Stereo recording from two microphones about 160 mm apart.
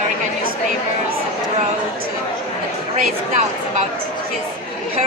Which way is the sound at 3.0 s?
50° right (ahead or behind).